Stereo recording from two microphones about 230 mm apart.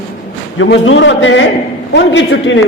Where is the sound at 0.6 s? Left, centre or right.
Left.